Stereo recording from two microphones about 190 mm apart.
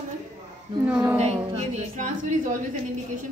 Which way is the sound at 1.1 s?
35° right (ahead or behind).